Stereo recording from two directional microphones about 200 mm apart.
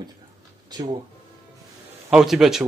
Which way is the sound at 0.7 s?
20° right (ahead or behind).